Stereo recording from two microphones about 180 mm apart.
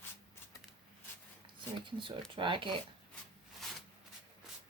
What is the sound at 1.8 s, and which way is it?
Speech, 30° right (ahead or behind).